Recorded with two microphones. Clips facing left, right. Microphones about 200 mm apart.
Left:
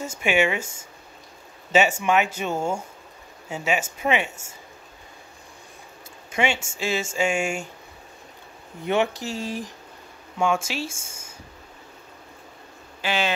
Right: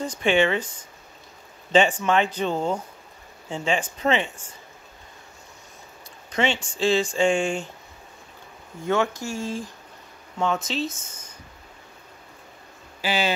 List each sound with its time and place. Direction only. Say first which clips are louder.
0.2 s speech: right 1 dB; 10° left (ahead or behind)
1.7 s speech: right 1 dB; 10° left (ahead or behind)
6.3 s speech: even; 10° left (ahead or behind)
8.8 s speech: even; 15° left (ahead or behind)
10.9 s speech: right 2 dB; 25° left (ahead or behind)